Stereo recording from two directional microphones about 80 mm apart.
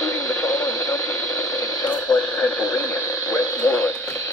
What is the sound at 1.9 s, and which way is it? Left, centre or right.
Radio, centre.